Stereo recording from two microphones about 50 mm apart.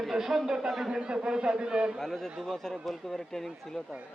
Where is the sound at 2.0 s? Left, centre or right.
Centre.